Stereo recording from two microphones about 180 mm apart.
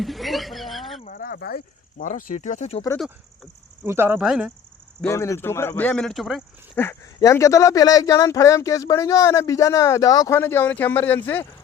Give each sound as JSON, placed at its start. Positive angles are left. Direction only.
{"t": 0.0, "sound": "a sound", "side_deg": 0}
{"t": 1.0, "sound": "speech", "side_deg": 55}
{"t": 3.8, "sound": "speech", "side_deg": -15}
{"t": 4.9, "sound": "speech", "side_deg": 15}
{"t": 6.7, "sound": "speech", "side_deg": 15}